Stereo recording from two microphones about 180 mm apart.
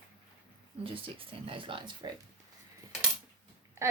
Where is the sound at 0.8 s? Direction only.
30° right (ahead or behind).